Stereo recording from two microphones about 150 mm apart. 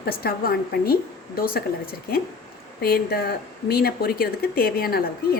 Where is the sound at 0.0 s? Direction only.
90° left.